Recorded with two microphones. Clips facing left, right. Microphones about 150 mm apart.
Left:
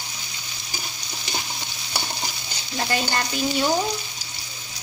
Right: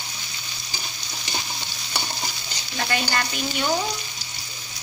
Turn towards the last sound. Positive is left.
turn(degrees=20)  # may be behind; listen again after turning